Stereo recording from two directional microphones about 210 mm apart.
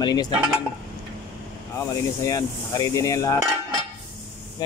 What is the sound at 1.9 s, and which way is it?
Speech, 15° left (ahead or behind).